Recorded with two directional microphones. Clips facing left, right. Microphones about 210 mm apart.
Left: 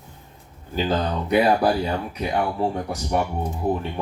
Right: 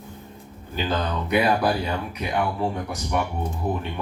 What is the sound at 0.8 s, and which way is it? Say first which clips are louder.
Speech: left 3 dB; 35° left (ahead or behind).